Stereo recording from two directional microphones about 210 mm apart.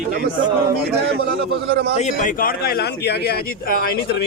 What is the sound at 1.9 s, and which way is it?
Speech, 35° left (ahead or behind).